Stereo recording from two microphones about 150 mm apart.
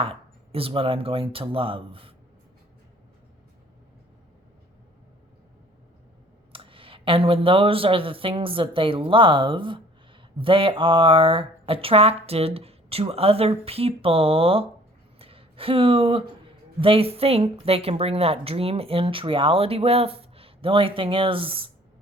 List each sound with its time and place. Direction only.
0.0 s a woman's voice: 40° right (ahead or behind)
6.5 s a woman's voice: 35° right (ahead or behind)
15.2 s a sound: 40° right (ahead or behind)
16.8 s a woman's voice: 40° right (ahead or behind)